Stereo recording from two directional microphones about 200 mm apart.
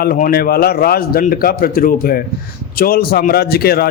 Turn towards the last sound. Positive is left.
turn(degrees=50)  # may be behind; listen again after turning